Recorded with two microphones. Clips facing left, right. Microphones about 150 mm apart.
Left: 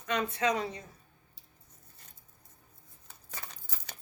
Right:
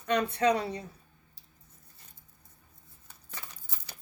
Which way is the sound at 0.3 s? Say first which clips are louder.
Right 4 dB; 35° right (ahead or behind).